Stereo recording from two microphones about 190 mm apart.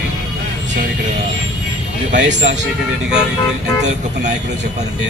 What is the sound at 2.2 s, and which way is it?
Speech, 65° right (ahead or behind).